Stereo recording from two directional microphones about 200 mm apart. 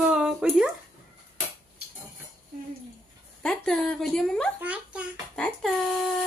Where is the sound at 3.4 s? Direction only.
5° left (ahead or behind).